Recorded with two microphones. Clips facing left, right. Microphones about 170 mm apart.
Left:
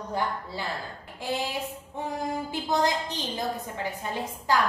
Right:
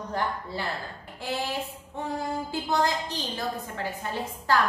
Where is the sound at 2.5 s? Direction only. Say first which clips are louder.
Even; 20° left (ahead or behind).